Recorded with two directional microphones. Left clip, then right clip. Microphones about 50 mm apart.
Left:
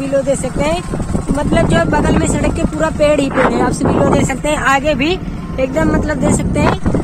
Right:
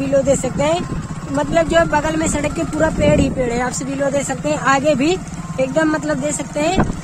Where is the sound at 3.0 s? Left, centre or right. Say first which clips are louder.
Left 4 dB; left.